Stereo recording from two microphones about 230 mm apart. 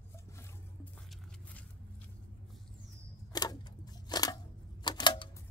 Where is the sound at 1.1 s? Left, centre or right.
Centre.